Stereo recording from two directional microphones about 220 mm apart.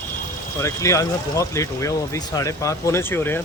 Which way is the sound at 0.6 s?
15° left (ahead or behind).